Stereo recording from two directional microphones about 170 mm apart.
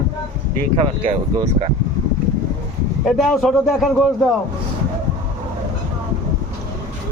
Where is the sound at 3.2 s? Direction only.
Centre (ahead or behind).